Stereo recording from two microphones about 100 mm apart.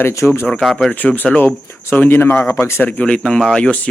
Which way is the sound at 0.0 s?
25° left (ahead or behind).